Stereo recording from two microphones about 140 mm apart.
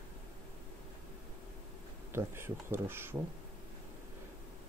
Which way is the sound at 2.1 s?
15° right (ahead or behind).